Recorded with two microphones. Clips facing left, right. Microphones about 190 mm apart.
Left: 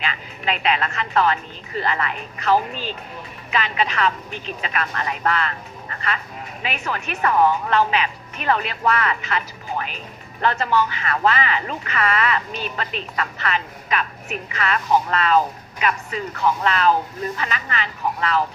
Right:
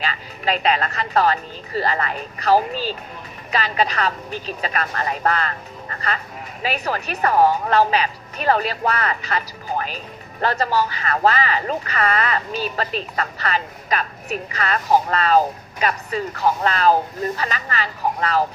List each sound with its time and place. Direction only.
0.0 s speech: 35° right (ahead or behind)